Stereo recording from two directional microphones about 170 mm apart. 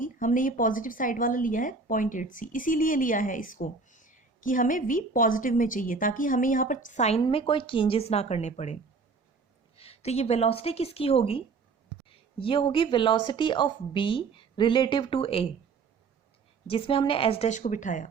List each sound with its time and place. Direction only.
0.0 s a woman's voice: 50° left (ahead or behind)
7.2 s a woman's voice: 30° left (ahead or behind)
16.6 s a woman's voice: 35° left (ahead or behind); by 18.1 s 50° left (ahead or behind)